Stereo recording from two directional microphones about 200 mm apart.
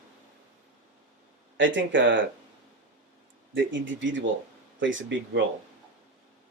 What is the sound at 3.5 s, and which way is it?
Speech, 70° right (ahead or behind).